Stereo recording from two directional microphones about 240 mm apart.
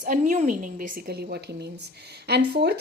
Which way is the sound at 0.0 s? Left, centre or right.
Right.